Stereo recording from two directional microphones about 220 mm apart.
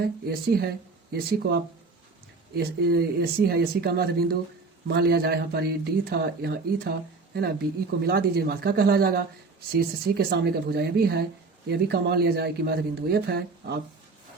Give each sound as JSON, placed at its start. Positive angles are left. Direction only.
{"t": 0.0, "sound": "speech", "side_deg": -45}
{"t": 8.0, "sound": "speech", "side_deg": -45}